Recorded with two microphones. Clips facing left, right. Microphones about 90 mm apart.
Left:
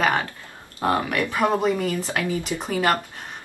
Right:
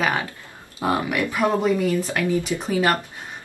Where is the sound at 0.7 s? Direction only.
15° right (ahead or behind).